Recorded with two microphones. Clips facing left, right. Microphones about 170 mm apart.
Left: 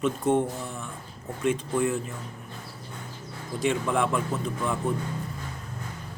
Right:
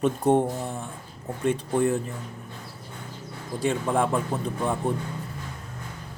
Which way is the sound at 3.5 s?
35° right (ahead or behind).